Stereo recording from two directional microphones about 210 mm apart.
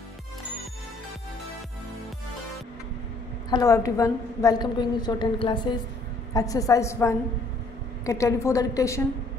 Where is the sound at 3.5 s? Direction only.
15° left (ahead or behind).